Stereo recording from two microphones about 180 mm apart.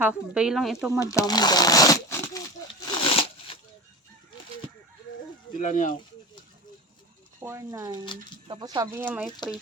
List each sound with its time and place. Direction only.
0.0 s speech: 5° right (ahead or behind)
0.9 s speech: 20° left (ahead or behind)
3.0 s a sound: 30° left (ahead or behind)
5.5 s speech: 45° left (ahead or behind)
7.3 s speech: 15° right (ahead or behind)
9.4 s speech: 25° left (ahead or behind)